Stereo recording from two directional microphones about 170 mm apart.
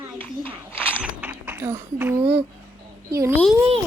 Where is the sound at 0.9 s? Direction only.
10° right (ahead or behind).